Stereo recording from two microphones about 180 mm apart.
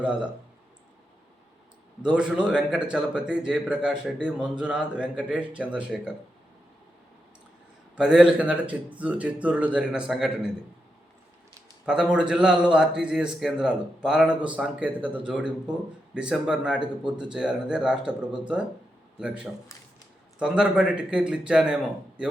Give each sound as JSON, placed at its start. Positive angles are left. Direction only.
{"t": 0.0, "sound": "a man's voice", "side_deg": -5}
{"t": 2.0, "sound": "a man's voice", "side_deg": -5}
{"t": 7.9, "sound": "a man's voice", "side_deg": -5}
{"t": 11.9, "sound": "a man's voice", "side_deg": -5}
{"t": 19.2, "sound": "a man's voice", "side_deg": -5}